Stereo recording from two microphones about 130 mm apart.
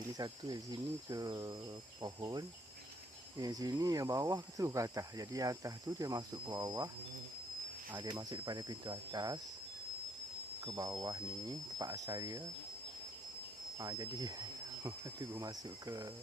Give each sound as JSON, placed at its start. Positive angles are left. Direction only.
{"t": 0.2, "sound": "speech", "side_deg": -30}
{"t": 7.9, "sound": "speech", "side_deg": -35}
{"t": 10.6, "sound": "speech", "side_deg": -25}
{"t": 13.7, "sound": "speech", "side_deg": -30}